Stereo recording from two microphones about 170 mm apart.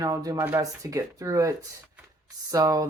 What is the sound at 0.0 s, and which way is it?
Speech, 20° right (ahead or behind).